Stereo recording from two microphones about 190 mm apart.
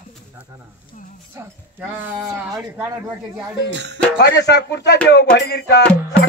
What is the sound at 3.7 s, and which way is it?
Speech, 65° right (ahead or behind).